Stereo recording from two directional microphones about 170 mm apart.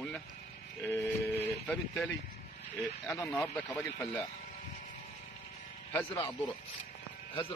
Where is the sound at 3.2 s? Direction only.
10° left (ahead or behind).